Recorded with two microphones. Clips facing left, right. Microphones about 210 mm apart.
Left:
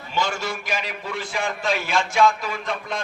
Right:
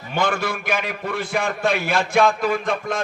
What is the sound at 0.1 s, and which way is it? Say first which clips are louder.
A man's voice: right 4 dB; 55° right (ahead or behind).